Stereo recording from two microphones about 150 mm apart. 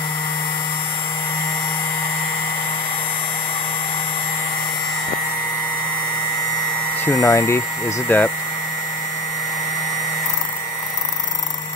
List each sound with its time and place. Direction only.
7.1 s speech: 20° left (ahead or behind)